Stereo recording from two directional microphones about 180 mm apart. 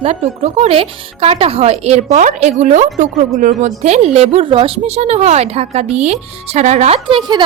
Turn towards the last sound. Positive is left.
turn(degrees=-35)  # may be behind; listen again after turning